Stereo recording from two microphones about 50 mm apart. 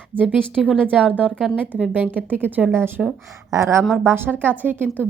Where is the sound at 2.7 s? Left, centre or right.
Right.